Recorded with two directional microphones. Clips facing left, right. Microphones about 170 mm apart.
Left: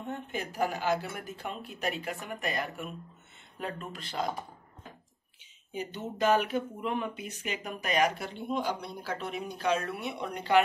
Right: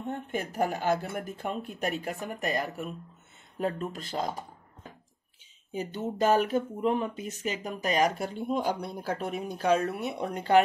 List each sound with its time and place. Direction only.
0.3 s speech: 50° right (ahead or behind)
5.7 s speech: 40° right (ahead or behind)